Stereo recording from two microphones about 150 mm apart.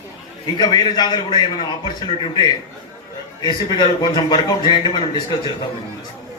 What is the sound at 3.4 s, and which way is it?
A man's voice, 30° left (ahead or behind).